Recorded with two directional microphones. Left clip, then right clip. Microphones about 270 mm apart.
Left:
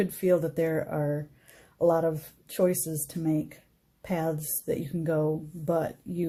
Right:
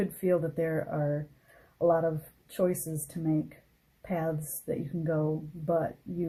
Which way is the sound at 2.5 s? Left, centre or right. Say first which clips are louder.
Left 3 dB; left.